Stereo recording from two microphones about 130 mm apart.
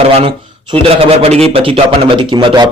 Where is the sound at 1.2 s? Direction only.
50° right (ahead or behind).